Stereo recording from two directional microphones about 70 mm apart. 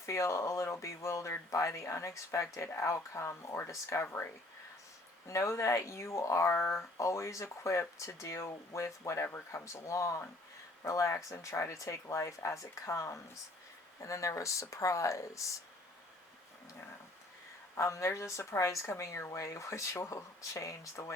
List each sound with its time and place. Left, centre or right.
0.0 s speech: left
5.3 s speech: left
17.7 s speech: left